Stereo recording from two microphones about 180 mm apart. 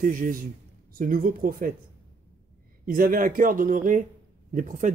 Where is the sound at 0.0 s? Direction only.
50° right (ahead or behind).